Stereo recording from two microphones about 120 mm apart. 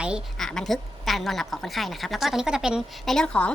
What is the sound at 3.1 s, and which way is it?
Speech, 10° left (ahead or behind).